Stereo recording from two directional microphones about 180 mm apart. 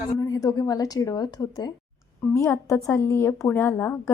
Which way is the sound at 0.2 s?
20° left (ahead or behind).